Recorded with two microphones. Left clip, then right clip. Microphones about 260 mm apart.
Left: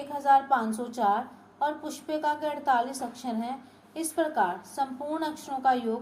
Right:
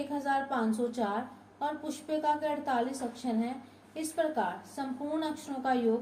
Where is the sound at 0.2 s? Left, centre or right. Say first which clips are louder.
Left 10 dB; left.